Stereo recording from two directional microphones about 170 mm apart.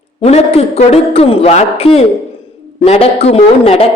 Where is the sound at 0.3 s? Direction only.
40° left (ahead or behind).